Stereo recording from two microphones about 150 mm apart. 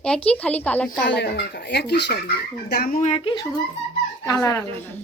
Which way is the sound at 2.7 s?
75° left (ahead or behind).